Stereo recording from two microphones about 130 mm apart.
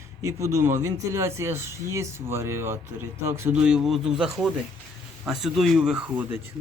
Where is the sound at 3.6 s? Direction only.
5° right (ahead or behind).